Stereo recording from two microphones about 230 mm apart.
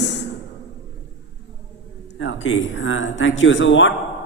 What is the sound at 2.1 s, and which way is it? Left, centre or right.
Speech, left.